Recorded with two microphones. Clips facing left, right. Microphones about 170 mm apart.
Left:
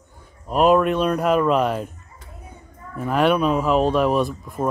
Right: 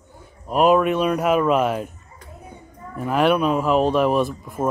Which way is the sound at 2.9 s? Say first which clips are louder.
Even; centre (ahead or behind).